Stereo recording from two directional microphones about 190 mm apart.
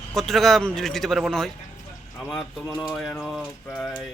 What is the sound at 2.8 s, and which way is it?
Speech, centre (ahead or behind).